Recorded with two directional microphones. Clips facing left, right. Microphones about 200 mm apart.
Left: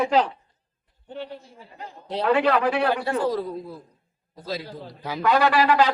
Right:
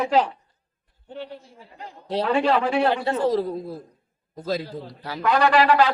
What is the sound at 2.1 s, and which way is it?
A man's voice, 25° right (ahead or behind).